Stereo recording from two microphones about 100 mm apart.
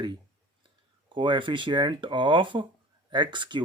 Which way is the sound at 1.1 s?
50° right (ahead or behind).